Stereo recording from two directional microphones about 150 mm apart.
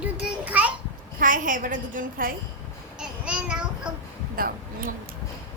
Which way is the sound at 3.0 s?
5° right (ahead or behind).